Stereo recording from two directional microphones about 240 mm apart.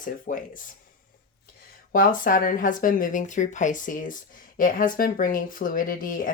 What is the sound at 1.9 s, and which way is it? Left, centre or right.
Speech, left.